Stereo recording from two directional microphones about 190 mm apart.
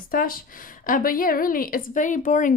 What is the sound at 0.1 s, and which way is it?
Speech, 50° left (ahead or behind).